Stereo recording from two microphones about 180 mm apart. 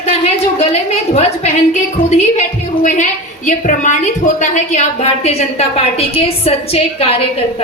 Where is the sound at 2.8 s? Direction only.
45° left (ahead or behind).